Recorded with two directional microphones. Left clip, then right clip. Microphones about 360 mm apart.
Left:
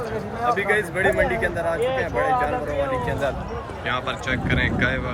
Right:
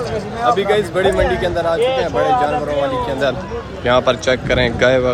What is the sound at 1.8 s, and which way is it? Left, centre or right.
Speech, right.